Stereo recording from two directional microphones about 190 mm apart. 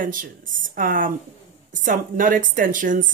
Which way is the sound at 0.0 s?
45° right (ahead or behind).